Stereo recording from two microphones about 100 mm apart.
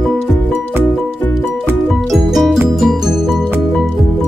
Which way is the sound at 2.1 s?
Centre (ahead or behind).